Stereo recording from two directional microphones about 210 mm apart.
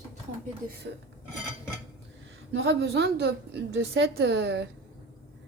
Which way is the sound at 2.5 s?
55° right (ahead or behind).